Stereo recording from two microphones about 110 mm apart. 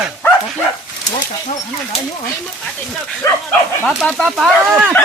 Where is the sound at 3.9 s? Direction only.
Centre (ahead or behind).